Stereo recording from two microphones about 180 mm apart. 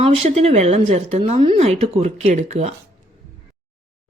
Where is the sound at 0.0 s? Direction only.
35° right (ahead or behind).